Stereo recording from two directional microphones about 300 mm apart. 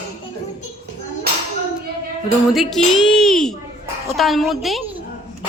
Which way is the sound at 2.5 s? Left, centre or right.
Centre.